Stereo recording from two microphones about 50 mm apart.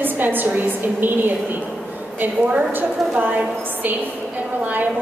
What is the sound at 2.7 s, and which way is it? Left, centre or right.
A woman's voice, right.